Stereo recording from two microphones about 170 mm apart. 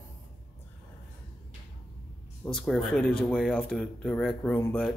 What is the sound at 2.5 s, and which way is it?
Speech, centre (ahead or behind).